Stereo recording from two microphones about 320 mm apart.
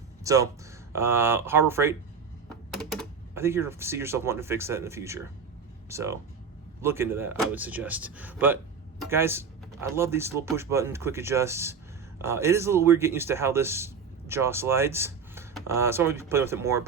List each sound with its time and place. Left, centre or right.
0.3 s speech: centre